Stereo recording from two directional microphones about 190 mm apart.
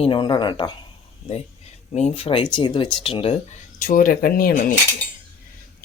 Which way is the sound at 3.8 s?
45° left (ahead or behind).